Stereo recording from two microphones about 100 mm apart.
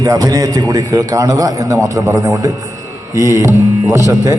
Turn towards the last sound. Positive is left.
turn(degrees=-30)  # may be behind; listen again after turning